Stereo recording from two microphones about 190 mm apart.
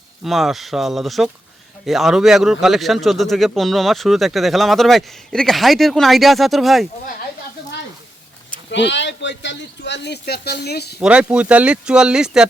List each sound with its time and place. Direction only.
0.3 s speech: centre (ahead or behind)
8.7 s speech: 70° left (ahead or behind)
11.0 s speech: 5° right (ahead or behind)